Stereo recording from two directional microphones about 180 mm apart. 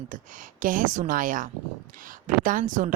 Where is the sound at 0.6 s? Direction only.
50° right (ahead or behind).